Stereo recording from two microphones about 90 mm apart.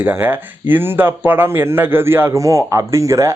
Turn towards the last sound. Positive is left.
turn(degrees=-35)  # may be behind; listen again after turning